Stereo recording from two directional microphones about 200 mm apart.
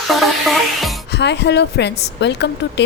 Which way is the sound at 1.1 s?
60° left (ahead or behind).